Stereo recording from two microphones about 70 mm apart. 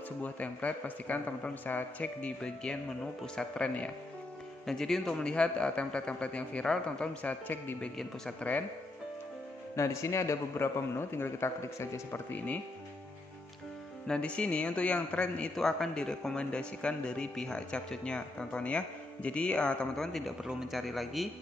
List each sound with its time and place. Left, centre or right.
0.2 s a man's voice: left
7.4 s a man's voice: left
9.8 s a man's voice: left
14.0 s a man's voice: centre